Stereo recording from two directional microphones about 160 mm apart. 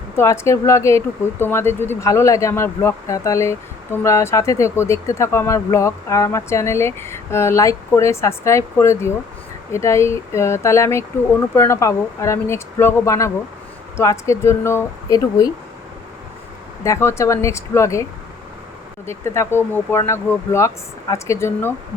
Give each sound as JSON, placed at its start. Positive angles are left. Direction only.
{"t": 0.2, "sound": "speech", "side_deg": 20}
{"t": 16.8, "sound": "speech", "side_deg": 20}
{"t": 19.0, "sound": "speech", "side_deg": 15}